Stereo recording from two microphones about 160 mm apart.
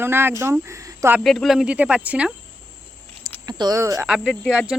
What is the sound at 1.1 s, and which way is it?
Speech, centre (ahead or behind).